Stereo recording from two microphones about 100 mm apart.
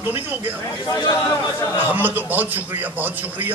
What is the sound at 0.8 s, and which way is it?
Speech, 40° left (ahead or behind).